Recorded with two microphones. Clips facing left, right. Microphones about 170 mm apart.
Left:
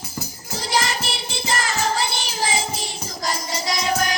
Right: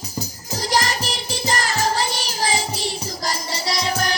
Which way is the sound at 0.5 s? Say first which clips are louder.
Right 2 dB; 40° right (ahead or behind).